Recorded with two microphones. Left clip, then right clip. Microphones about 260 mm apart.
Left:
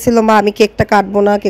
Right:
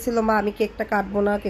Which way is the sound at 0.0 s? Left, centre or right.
Left.